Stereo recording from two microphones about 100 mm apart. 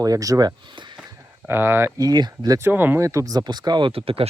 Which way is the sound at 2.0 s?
40° right (ahead or behind).